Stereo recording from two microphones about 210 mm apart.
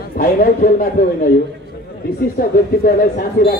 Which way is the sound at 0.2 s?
40° left (ahead or behind).